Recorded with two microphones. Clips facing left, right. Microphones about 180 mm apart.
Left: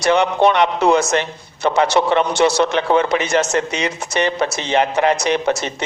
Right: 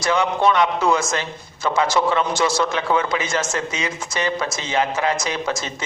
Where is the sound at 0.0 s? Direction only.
65° left (ahead or behind).